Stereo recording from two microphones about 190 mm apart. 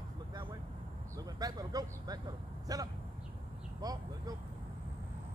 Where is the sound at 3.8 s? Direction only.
20° right (ahead or behind).